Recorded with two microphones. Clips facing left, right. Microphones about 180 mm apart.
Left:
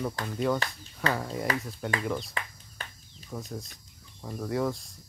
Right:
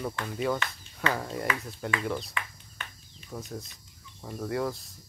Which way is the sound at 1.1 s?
Centre (ahead or behind).